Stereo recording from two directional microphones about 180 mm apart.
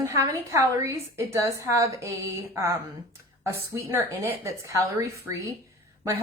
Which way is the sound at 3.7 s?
15° right (ahead or behind).